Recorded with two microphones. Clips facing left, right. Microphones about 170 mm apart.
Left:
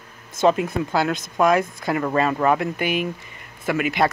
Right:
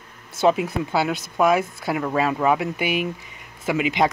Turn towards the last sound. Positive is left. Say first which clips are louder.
# even
turn(degrees=-15)  # may be behind; listen again after turning